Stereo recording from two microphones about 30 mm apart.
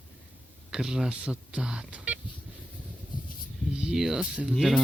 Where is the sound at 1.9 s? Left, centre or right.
Right.